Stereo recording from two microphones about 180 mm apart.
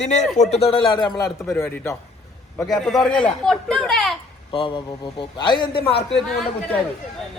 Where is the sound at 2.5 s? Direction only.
Centre (ahead or behind).